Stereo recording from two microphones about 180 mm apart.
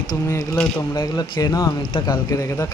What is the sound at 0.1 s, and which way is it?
Speech, 15° left (ahead or behind).